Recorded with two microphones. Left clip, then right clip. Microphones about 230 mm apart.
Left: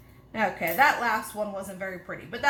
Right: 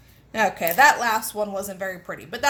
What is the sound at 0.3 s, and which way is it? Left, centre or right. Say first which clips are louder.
A woman's voice: right 5 dB; right.